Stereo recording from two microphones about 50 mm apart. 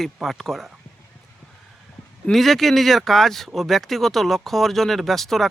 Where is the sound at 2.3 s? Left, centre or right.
Centre.